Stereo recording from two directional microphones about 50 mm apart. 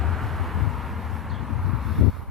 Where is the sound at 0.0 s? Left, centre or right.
Centre.